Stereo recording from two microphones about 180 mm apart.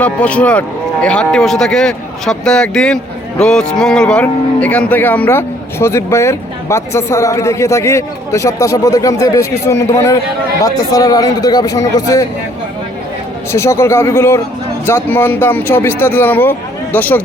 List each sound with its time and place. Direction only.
0.0 s a man's voice: 5° left (ahead or behind)
13.5 s speech: 15° left (ahead or behind)